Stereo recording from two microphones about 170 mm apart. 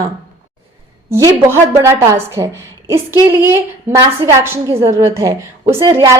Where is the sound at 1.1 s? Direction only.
15° right (ahead or behind).